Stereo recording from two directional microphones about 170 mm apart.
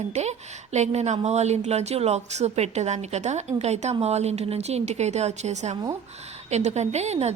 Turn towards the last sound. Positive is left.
turn(degrees=-40)  # may be behind; listen again after turning